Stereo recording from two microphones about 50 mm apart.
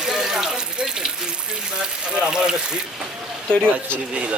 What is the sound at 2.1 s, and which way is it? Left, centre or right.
Speech, centre.